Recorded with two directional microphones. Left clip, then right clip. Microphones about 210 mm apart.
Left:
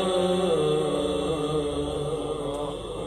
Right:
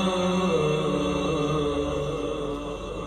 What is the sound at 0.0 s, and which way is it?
Music, 30° left (ahead or behind).